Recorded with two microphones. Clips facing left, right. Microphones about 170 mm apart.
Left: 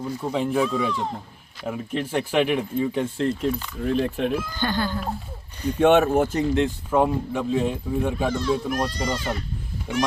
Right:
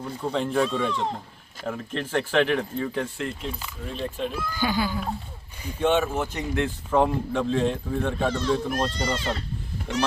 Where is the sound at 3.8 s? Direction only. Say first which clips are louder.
Left 7 dB; 65° left (ahead or behind).